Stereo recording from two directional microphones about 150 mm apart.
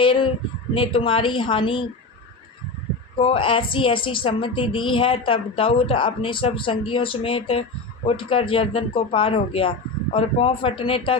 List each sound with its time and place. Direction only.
0.0 s a sound: 35° left (ahead or behind)
0.7 s a woman's voice: 35° left (ahead or behind)
3.2 s a woman's voice: 35° left (ahead or behind)